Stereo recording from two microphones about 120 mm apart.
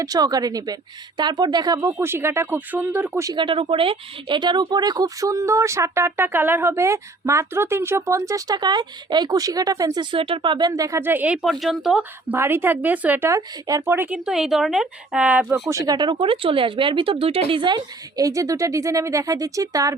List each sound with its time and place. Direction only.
0.0 s speech: 30° right (ahead or behind)
3.3 s speech: 45° right (ahead or behind)
10.7 s speech: 30° right (ahead or behind)
11.0 s speech: 15° right (ahead or behind)
11.6 s speech: centre (ahead or behind)
12.3 s speech: 20° right (ahead or behind)
14.3 s speech: 5° right (ahead or behind)
15.5 s speech: 25° right (ahead or behind)
16.0 s speech: 40° right (ahead or behind)